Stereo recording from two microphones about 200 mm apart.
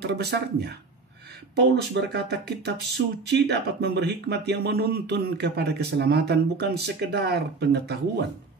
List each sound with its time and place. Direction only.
0.0 s speech: 55° right (ahead or behind)